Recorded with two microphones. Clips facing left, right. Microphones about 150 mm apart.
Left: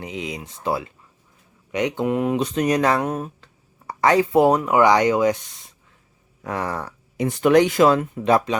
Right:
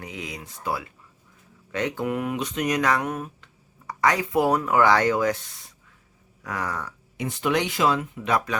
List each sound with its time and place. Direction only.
0.0 s speech: 20° left (ahead or behind)
7.3 s speech: 50° left (ahead or behind)
8.2 s speech: 30° left (ahead or behind)